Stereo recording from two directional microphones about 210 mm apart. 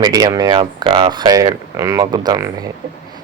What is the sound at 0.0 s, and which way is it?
Speech, 20° right (ahead or behind).